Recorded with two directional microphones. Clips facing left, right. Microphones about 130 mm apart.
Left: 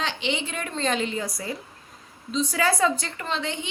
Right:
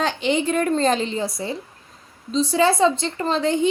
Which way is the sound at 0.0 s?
45° right (ahead or behind).